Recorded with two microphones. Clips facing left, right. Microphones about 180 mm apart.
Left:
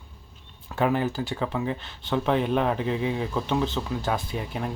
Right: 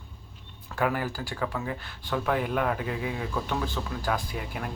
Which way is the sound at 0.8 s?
25° left (ahead or behind).